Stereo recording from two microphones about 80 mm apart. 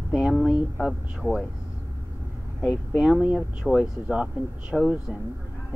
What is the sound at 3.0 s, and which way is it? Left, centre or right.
Speech, centre.